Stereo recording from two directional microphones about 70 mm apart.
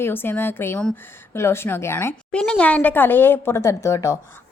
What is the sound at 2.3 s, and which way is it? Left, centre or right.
A woman's voice, centre.